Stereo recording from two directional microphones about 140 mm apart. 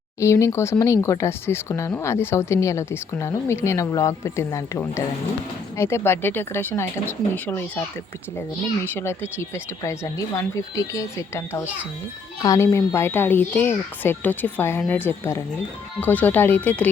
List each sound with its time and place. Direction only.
0.2 s speech: 20° left (ahead or behind)
8.8 s speech: 15° left (ahead or behind)